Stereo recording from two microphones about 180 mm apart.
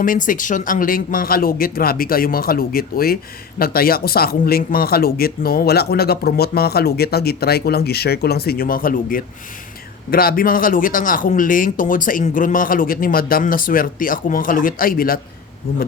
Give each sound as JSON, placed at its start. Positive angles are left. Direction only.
{"t": 0.0, "sound": "speech", "side_deg": 50}